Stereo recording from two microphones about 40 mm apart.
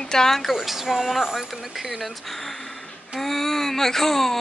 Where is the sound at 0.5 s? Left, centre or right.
Centre.